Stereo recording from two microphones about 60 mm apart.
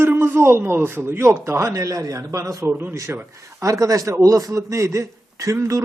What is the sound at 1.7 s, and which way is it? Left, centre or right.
A man's voice, right.